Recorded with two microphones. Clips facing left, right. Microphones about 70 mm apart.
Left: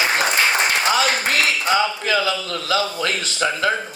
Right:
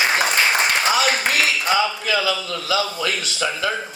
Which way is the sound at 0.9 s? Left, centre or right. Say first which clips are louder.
Even; left.